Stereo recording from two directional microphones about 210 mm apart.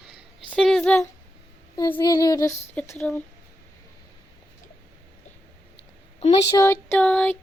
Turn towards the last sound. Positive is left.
turn(degrees=5)  # may be behind; listen again after turning